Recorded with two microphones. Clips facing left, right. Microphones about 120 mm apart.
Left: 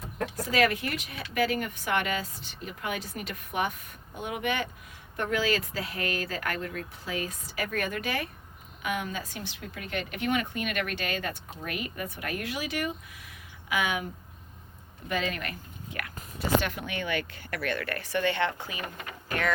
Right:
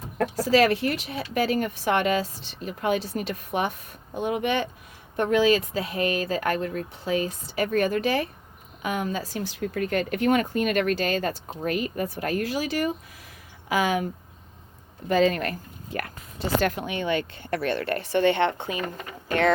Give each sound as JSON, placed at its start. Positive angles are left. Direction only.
{"t": 0.3, "sound": "a woman's voice", "side_deg": -30}
{"t": 15.1, "sound": "speech", "side_deg": -35}
{"t": 16.8, "sound": "speech", "side_deg": -20}